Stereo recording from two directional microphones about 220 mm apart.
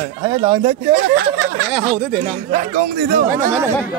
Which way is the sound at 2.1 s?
30° right (ahead or behind).